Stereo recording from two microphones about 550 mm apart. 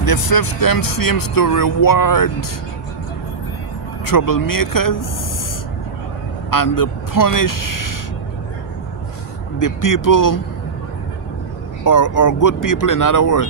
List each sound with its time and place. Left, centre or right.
0.0 s speech: left
4.0 s speech: left
6.5 s speech: left
9.6 s speech: left
11.8 s speech: left